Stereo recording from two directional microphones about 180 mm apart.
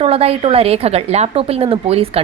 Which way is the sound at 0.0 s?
35° right (ahead or behind).